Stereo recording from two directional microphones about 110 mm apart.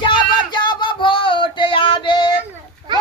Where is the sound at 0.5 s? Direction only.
45° left (ahead or behind).